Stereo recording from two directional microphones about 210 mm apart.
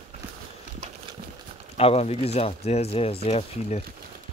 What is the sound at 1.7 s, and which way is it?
Speech, 30° left (ahead or behind).